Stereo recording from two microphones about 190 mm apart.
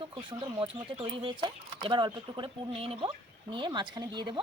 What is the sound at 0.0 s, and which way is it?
Speech, 25° right (ahead or behind).